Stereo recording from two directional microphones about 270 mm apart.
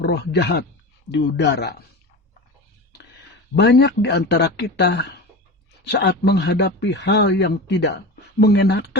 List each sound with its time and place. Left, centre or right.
0.0 s a man's voice: left
3.5 s a man's voice: left